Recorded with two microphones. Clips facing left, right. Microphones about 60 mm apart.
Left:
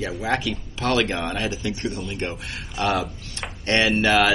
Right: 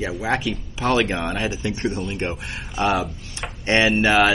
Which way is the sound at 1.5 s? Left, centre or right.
Right.